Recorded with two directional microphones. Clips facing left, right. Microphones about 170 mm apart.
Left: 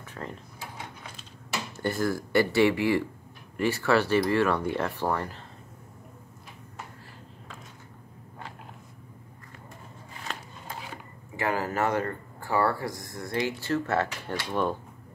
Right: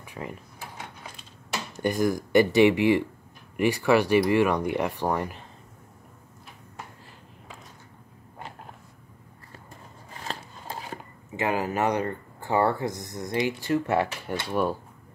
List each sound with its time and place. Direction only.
0.0 s drawer open or close: 10° right (ahead or behind)
1.8 s speech: 15° right (ahead or behind)
10.2 s a sound: 35° right (ahead or behind)
11.3 s speech: 20° right (ahead or behind)